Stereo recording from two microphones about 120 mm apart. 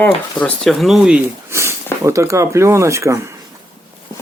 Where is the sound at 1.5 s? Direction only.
25° right (ahead or behind).